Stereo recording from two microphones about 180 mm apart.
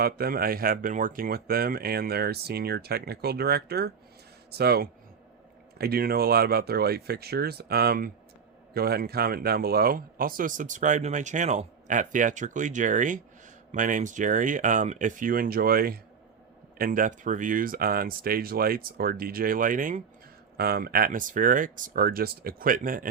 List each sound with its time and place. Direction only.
0.0 s speech: 55° right (ahead or behind)